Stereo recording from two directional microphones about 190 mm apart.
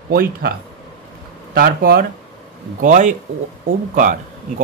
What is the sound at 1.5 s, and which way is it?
Speech, 50° right (ahead or behind).